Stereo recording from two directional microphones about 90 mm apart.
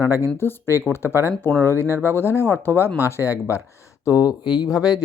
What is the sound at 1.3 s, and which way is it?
Speech, 5° left (ahead or behind).